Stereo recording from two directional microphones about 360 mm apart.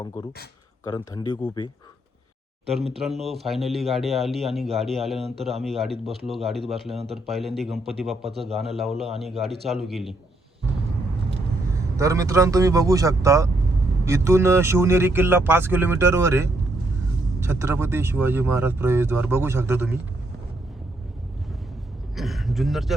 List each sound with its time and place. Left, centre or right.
0.9 s speech: centre
2.8 s speech: centre
3.2 s a man's voice: centre
11.9 s speech: centre
22.1 s a man's voice: centre